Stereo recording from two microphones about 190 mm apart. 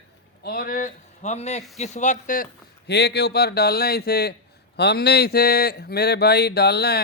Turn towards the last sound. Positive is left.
turn(degrees=60)  # may be behind; listen again after turning